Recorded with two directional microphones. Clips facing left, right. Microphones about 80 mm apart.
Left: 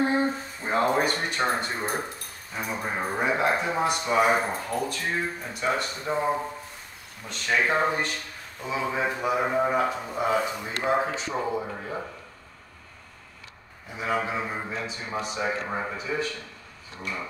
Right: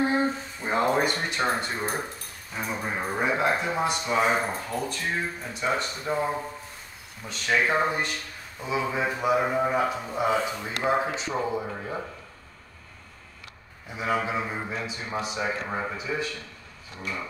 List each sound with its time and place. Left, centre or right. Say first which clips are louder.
0.0 s a sound: even; centre
0.9 s speech: even; centre
3.8 s speech: left 3 dB; centre
7.2 s speech: even; centre
13.9 s speech: right 1 dB; centre
16.0 s speech: left 1 dB; centre
17.0 s speech: even; centre